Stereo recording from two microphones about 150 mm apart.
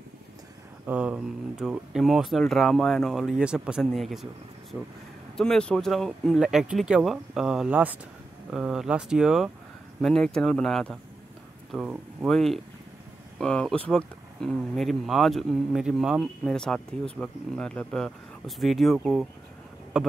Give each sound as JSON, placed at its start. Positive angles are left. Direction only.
{"t": 0.8, "sound": "speech", "side_deg": -10}
{"t": 5.4, "sound": "speech", "side_deg": 5}
{"t": 11.7, "sound": "speech", "side_deg": -10}
{"t": 12.3, "sound": "speech", "side_deg": 5}